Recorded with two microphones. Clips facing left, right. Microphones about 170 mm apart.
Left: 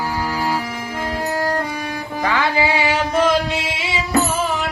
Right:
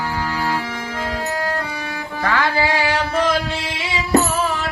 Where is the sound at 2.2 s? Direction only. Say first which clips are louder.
Even; centre (ahead or behind).